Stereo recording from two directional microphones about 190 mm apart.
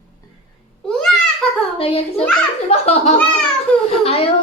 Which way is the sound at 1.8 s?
30° left (ahead or behind).